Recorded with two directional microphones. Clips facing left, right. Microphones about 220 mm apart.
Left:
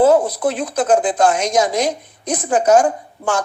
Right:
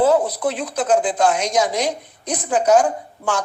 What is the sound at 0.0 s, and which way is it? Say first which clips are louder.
Speech: left 3 dB; 45° left (ahead or behind).